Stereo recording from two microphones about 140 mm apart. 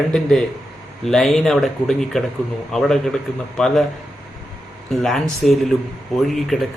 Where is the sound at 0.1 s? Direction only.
5° left (ahead or behind).